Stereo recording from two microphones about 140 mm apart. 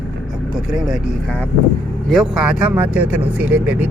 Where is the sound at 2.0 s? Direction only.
5° right (ahead or behind).